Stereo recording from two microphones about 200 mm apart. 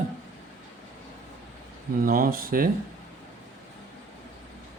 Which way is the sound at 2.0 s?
45° right (ahead or behind).